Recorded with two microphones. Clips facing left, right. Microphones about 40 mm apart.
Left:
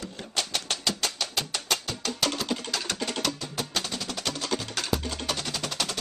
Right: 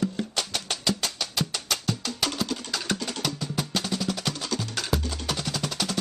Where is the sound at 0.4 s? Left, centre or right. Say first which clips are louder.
Left 4 dB; centre.